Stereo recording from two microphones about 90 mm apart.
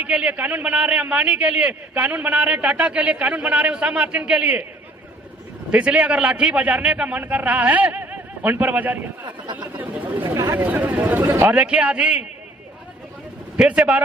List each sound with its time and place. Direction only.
0.0 s a man's voice: 15° right (ahead or behind)
5.7 s a man's voice: 15° right (ahead or behind)
9.2 s speech: 50° right (ahead or behind)
9.7 s speech: 20° right (ahead or behind)
10.2 s speech: 40° right (ahead or behind)
10.6 s a man's voice: 20° right (ahead or behind)
13.6 s a man's voice: 15° right (ahead or behind)